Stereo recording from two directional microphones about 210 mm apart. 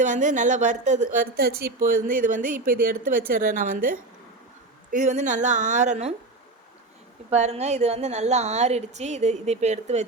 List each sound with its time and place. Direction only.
0.0 s speech: 35° right (ahead or behind)
7.3 s speech: 30° right (ahead or behind)